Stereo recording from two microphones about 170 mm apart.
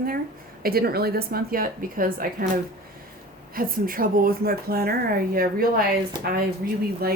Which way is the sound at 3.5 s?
55° right (ahead or behind).